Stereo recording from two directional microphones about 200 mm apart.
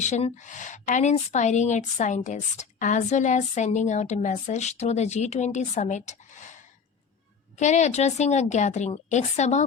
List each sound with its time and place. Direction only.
0.0 s a woman's voice: 35° left (ahead or behind)